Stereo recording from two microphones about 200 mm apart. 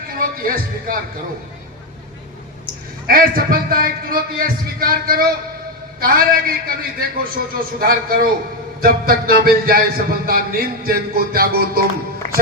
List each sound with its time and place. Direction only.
0.1 s speech: 45° right (ahead or behind)
3.1 s speech: 45° right (ahead or behind)